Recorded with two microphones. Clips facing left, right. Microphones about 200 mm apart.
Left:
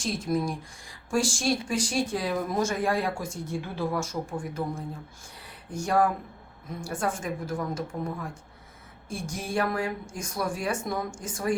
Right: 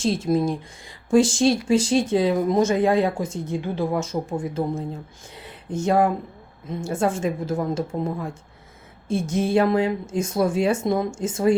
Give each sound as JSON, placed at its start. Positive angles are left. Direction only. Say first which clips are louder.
{"t": 0.0, "sound": "speech", "louder": "right 7 dB", "side_deg": -25}